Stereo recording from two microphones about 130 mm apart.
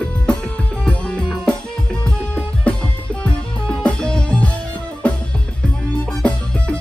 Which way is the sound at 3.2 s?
10° left (ahead or behind).